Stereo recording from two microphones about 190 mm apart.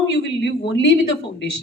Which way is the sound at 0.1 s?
60° left (ahead or behind).